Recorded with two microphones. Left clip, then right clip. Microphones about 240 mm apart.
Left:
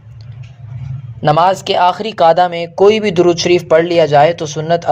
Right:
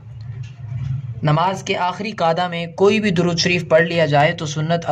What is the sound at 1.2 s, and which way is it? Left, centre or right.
Speech, left.